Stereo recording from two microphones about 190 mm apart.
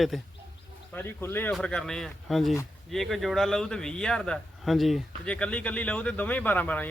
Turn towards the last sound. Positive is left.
turn(degrees=10)  # may be behind; listen again after turning